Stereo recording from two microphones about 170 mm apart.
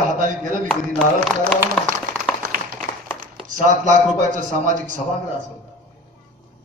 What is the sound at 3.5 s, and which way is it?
A man's voice, 50° right (ahead or behind).